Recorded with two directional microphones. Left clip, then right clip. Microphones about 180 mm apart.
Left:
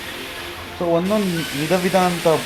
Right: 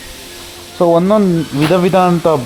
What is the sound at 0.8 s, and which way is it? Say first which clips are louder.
Sizzle: right 9 dB; 40° right (ahead or behind).